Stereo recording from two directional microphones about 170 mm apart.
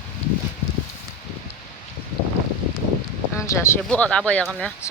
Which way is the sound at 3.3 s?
15° left (ahead or behind).